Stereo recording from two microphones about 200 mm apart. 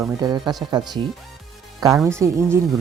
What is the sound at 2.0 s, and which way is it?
Speech, 15° right (ahead or behind).